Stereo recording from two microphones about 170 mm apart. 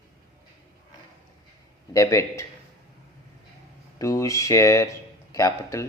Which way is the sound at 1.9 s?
15° left (ahead or behind).